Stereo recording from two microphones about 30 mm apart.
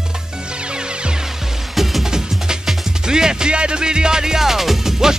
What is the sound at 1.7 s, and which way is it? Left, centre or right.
Music, centre.